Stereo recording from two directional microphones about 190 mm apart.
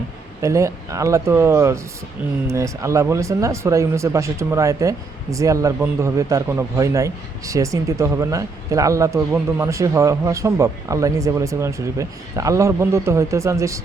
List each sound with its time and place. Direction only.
0.4 s speech: 15° right (ahead or behind)